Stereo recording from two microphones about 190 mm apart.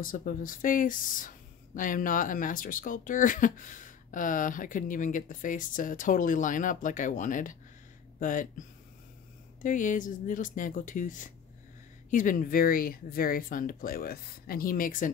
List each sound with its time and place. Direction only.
0.0 s speech: 45° left (ahead or behind)
9.6 s speech: 45° left (ahead or behind)